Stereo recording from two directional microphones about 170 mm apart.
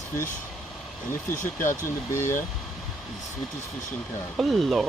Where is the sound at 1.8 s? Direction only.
15° left (ahead or behind).